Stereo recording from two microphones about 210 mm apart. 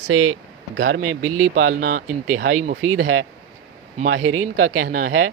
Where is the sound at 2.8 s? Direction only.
75° right (ahead or behind).